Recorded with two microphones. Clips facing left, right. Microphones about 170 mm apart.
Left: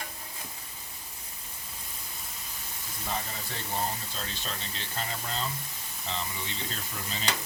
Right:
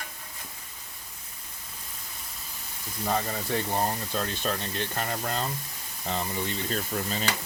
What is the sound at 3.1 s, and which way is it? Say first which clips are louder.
Speech: right 8 dB; 55° right (ahead or behind).